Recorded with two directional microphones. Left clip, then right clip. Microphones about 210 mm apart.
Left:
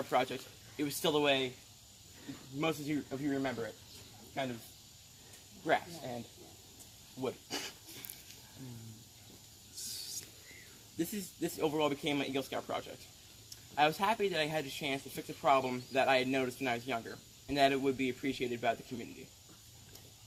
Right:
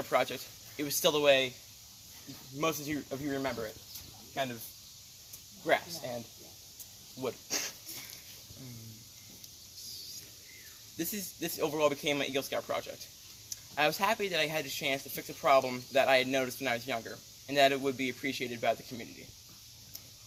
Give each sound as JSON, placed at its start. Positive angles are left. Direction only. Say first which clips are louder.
{"t": 0.1, "sound": "speech", "louder": "right 3 dB", "side_deg": -15}
{"t": 2.6, "sound": "speech", "louder": "right 2 dB", "side_deg": -20}
{"t": 7.2, "sound": "speech", "louder": "right 3 dB", "side_deg": -15}
{"t": 10.9, "sound": "speech", "louder": "even", "side_deg": -20}